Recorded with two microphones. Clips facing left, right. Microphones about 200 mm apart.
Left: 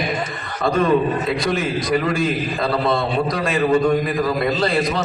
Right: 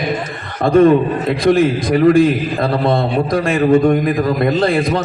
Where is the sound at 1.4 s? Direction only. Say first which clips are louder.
Right 9 dB; 50° right (ahead or behind).